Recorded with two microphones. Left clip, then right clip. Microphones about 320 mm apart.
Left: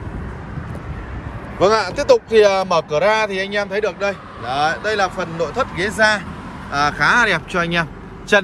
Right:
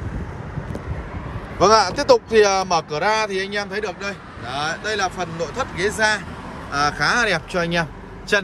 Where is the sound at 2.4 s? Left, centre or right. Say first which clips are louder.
Left 3 dB; centre.